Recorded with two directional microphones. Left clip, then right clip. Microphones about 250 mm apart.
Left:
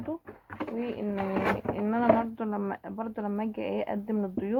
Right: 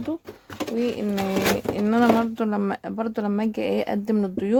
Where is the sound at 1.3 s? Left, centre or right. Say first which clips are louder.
Right 5 dB; right.